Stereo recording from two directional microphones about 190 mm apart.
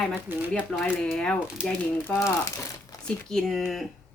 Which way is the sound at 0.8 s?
5° left (ahead or behind).